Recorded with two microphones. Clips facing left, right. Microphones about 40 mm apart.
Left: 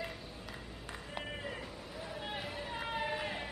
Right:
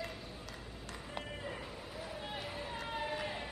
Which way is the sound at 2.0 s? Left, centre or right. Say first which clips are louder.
Left 2 dB; centre.